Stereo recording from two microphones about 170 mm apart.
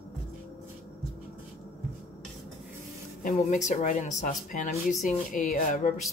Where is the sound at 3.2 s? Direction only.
45° left (ahead or behind).